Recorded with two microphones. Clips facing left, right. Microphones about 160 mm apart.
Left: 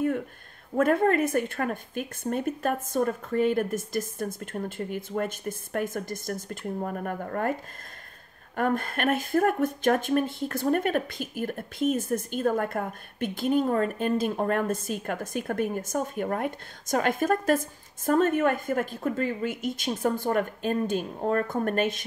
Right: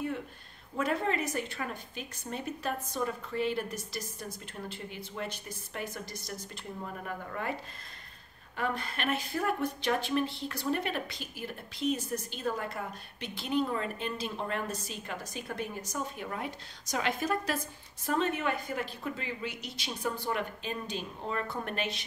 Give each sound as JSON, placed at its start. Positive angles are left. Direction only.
{"t": 0.7, "sound": "speech", "side_deg": 50}
{"t": 8.5, "sound": "speech", "side_deg": 50}